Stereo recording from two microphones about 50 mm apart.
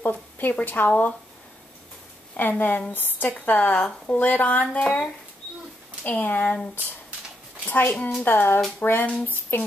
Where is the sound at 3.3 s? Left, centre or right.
Left.